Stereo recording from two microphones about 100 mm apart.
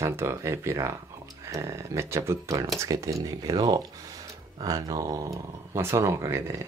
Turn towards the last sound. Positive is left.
turn(degrees=-30)  # may be behind; listen again after turning